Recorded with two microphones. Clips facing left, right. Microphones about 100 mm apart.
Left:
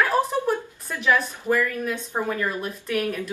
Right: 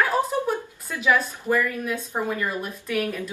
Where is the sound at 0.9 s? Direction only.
10° right (ahead or behind).